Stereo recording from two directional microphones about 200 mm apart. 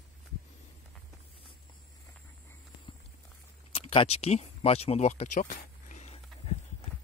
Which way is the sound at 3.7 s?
30° left (ahead or behind).